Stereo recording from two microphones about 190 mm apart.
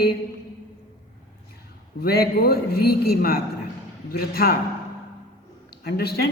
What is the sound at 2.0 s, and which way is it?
A man's voice, 55° left (ahead or behind).